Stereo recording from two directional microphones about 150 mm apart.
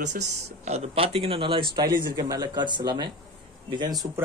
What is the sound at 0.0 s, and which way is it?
Speech, 55° right (ahead or behind).